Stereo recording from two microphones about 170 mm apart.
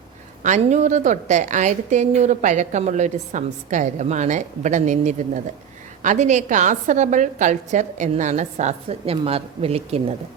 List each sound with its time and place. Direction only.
0.4 s a woman's voice: 45° right (ahead or behind)